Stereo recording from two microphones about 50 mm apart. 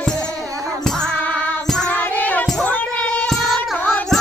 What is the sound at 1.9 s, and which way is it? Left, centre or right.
Music, left.